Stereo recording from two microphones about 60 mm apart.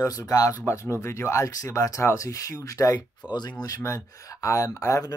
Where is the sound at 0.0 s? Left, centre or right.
Left.